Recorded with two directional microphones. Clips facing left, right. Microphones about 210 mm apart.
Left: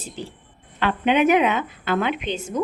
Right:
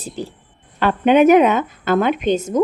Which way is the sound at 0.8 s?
45° right (ahead or behind).